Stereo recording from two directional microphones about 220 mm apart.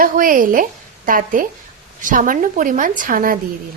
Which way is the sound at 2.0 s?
40° right (ahead or behind).